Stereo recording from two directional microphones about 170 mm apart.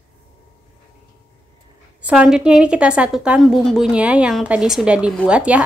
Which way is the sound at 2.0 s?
5° right (ahead or behind).